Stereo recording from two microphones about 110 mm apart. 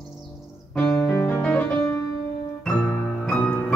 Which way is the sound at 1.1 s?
20° left (ahead or behind).